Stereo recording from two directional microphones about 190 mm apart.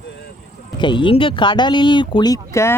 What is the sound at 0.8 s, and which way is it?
Speech, 25° left (ahead or behind).